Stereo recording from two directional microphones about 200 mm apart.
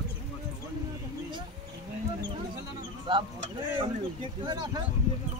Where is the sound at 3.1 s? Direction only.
20° right (ahead or behind).